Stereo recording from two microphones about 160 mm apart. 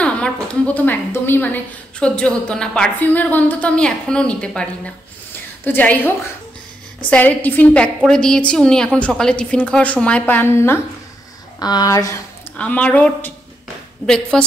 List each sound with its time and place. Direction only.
0.0 s a woman's voice: 10° left (ahead or behind)
12.5 s a woman's voice: 10° left (ahead or behind)